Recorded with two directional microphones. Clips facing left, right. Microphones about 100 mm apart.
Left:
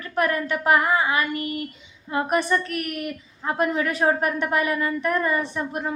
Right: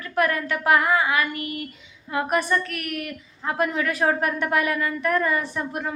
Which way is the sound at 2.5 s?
20° left (ahead or behind).